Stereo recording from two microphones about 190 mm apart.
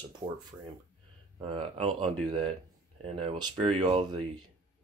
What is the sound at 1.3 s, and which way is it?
Speech, 30° right (ahead or behind).